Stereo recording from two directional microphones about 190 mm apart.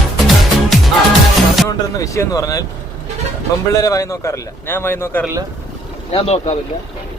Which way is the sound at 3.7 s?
15° left (ahead or behind).